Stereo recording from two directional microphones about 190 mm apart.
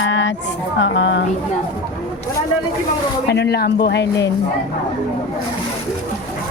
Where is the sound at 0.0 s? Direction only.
80° left.